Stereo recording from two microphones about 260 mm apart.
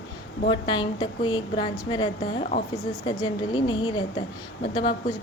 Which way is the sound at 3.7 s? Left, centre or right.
Left.